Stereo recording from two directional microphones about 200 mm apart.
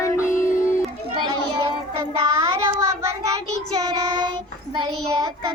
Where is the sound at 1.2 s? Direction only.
20° right (ahead or behind).